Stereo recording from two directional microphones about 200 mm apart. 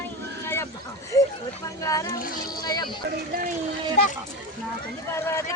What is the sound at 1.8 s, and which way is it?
A child's voice, 15° left (ahead or behind).